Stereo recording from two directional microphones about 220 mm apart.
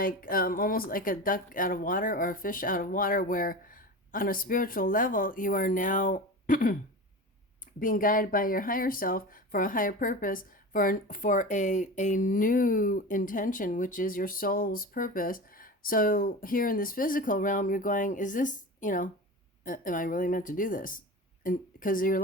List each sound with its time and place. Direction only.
0.0 s speech: 40° left (ahead or behind)
7.8 s speech: 40° left (ahead or behind)